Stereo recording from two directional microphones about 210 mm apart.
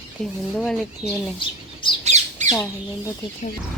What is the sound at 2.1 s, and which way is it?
Squawk, 30° right (ahead or behind).